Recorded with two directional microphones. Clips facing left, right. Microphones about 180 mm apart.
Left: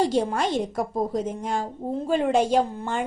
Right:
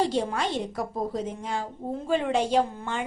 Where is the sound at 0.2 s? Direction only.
45° left (ahead or behind).